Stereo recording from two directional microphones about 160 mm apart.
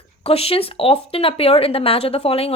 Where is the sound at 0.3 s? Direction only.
35° left (ahead or behind).